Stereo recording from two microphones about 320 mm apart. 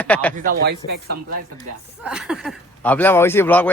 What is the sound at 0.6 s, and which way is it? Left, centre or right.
Speech, right.